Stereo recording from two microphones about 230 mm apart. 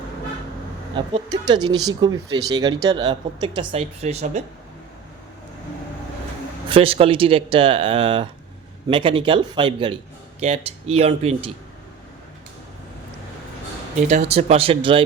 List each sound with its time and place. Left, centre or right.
0.9 s speech: centre
6.7 s speech: right
14.1 s speech: right